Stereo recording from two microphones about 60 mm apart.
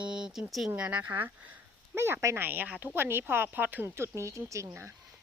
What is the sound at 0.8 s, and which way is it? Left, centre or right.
Speech, right.